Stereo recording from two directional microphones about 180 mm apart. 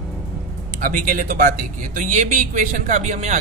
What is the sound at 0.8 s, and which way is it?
Speech, 50° right (ahead or behind).